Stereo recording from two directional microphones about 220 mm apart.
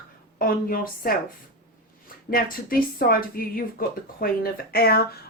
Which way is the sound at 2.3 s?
40° left (ahead or behind).